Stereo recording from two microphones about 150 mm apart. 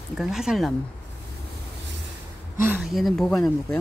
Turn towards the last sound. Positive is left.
turn(degrees=5)  # may be behind; listen again after turning